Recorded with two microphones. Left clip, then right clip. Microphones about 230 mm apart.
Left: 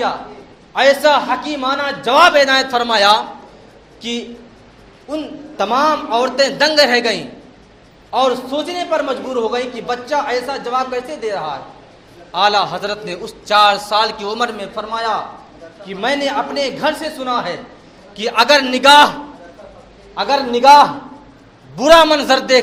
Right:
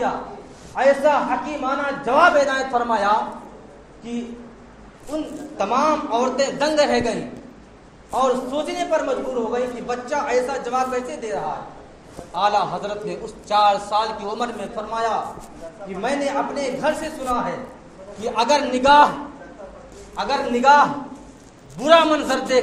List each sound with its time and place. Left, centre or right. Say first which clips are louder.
1.0 s a man's voice: left 5 dB; left
5.1 s a man's voice: left 4 dB; left
20.1 s a man's voice: left 6 dB; left